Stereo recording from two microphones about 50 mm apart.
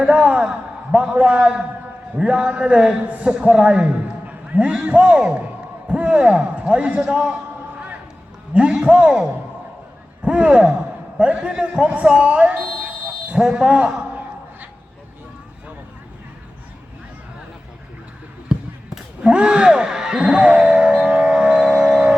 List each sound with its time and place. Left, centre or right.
0.0 s a man's voice: right
8.5 s a man's voice: right
10.2 s a man's voice: right
18.5 s basketball bounce: centre
19.2 s music: right